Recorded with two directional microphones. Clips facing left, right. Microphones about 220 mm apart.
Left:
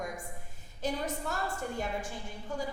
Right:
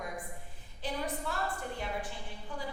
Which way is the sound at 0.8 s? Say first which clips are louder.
Left 2 dB; 45° left (ahead or behind).